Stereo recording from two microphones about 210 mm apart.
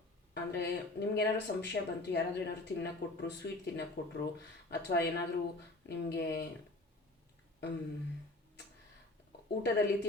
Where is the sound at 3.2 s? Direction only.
50° left (ahead or behind).